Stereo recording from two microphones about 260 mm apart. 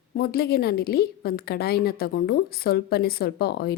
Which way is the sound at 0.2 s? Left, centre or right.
Left.